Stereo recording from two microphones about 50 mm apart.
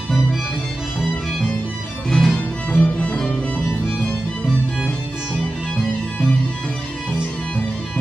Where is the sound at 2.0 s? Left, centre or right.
Centre.